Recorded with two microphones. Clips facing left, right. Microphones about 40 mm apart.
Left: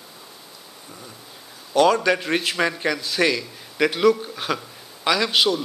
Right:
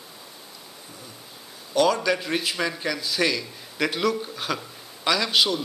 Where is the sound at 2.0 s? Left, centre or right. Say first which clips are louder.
Left 3 dB; centre.